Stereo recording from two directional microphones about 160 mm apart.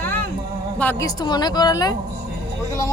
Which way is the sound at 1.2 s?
25° left (ahead or behind).